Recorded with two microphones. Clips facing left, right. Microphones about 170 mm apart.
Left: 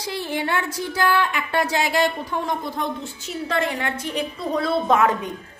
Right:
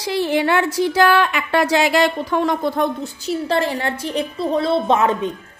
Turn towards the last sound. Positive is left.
turn(degrees=-25)  # may be behind; listen again after turning